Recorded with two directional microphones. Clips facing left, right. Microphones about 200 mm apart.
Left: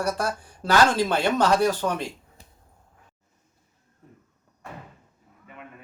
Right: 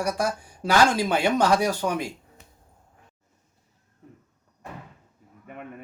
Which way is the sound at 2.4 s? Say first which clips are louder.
Even; 35° left (ahead or behind).